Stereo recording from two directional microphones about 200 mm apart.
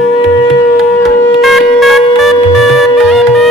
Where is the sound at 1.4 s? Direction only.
Centre (ahead or behind).